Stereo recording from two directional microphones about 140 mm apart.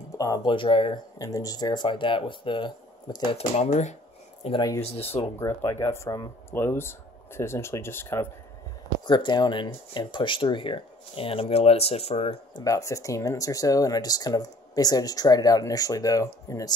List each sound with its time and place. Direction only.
0.2 s speech: 25° left (ahead or behind)
1.1 s speech: 25° left (ahead or behind)
3.5 s speech: 55° left (ahead or behind)
4.6 s speech: 25° left (ahead or behind)
4.8 s speech: 45° left (ahead or behind)
5.4 s speech: 20° left (ahead or behind)
9.0 s speech: 30° left (ahead or behind)
12.5 s speech: 25° left (ahead or behind)